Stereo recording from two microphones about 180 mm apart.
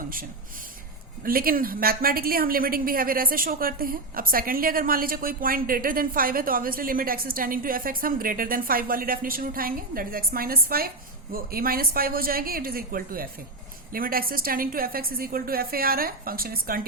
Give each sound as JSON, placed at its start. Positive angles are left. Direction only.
{"t": 1.2, "sound": "a woman's voice", "side_deg": -55}